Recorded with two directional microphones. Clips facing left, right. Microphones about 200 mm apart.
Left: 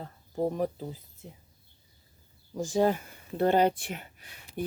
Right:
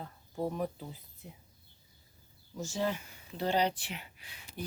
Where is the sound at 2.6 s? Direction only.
50° left (ahead or behind).